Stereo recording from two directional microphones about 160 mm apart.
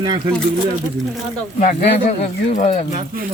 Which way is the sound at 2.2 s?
50° left (ahead or behind).